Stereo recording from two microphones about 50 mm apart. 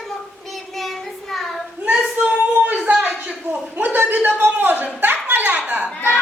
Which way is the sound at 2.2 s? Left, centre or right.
Right.